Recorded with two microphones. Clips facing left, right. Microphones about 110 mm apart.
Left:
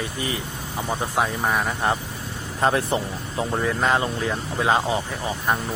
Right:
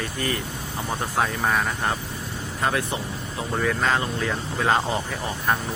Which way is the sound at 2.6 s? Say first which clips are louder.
Left 4 dB; 30° left (ahead or behind).